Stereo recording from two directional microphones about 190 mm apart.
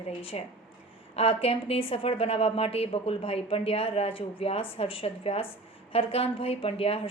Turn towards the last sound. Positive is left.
turn(degrees=30)  # may be behind; listen again after turning